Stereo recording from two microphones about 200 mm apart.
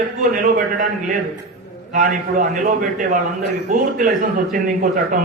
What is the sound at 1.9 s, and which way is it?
A man's voice, 40° right (ahead or behind).